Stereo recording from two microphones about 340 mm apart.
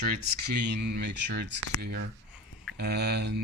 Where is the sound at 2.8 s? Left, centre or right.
Right.